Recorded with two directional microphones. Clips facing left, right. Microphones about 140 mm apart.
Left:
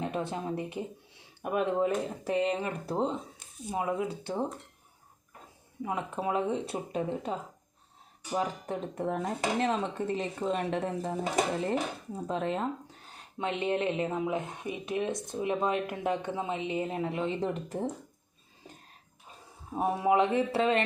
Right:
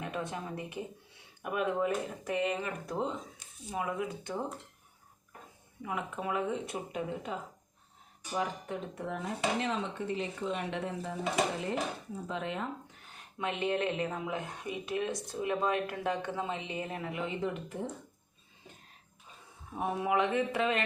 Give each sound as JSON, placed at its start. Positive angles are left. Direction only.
{"t": 0.0, "sound": "speech", "side_deg": 30}
{"t": 5.8, "sound": "speech", "side_deg": 30}
{"t": 8.4, "sound": "speech", "side_deg": 40}
{"t": 12.3, "sound": "speech", "side_deg": 40}
{"t": 13.4, "sound": "speech", "side_deg": 20}
{"t": 19.7, "sound": "speech", "side_deg": 30}